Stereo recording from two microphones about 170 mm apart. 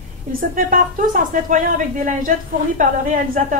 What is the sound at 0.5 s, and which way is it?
A woman's voice, 50° right (ahead or behind).